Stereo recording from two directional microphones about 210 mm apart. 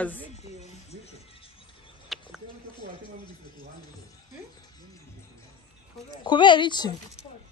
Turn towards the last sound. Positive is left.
turn(degrees=20)  # may be behind; listen again after turning